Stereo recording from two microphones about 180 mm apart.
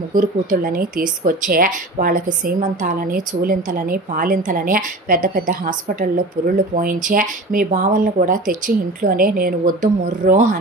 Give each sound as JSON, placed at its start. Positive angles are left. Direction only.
{"t": 0.1, "sound": "speech", "side_deg": -50}